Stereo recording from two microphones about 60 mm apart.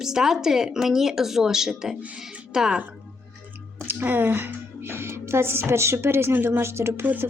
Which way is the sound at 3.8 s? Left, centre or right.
Right.